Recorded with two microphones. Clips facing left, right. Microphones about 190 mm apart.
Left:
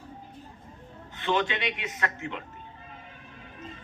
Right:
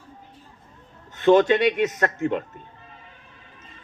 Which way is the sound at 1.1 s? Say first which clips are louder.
Right 12 dB; 45° right (ahead or behind).